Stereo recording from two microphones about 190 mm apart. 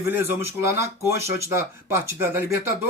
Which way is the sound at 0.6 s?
55° left (ahead or behind).